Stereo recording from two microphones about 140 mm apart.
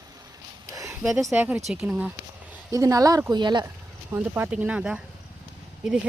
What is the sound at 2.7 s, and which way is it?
Speech, 25° right (ahead or behind).